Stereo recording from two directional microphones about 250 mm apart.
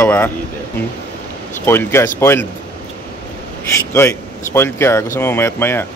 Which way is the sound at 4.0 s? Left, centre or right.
Centre.